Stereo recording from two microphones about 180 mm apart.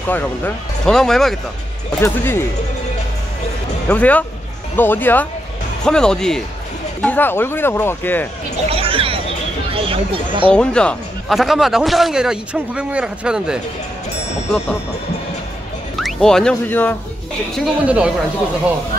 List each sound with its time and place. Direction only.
0.8 s a man's voice: 5° left (ahead or behind)
2.0 s speech: 15° left (ahead or behind)
3.9 s a man's voice: 10° left (ahead or behind)
8.6 s music: 30° right (ahead or behind)
9.7 s speech: 30° right (ahead or behind)
10.5 s a man's voice: 5° left (ahead or behind)
16.0 s speech: centre (ahead or behind)
17.6 s speech: 5° right (ahead or behind)